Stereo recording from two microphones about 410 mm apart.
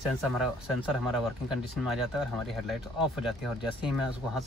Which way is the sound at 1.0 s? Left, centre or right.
Centre.